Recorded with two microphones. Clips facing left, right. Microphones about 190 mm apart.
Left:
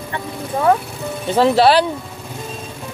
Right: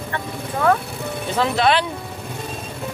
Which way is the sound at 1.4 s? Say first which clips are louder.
Left 6 dB; 35° left (ahead or behind).